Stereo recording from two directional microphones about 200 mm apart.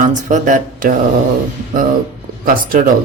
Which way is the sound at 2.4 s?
45° right (ahead or behind).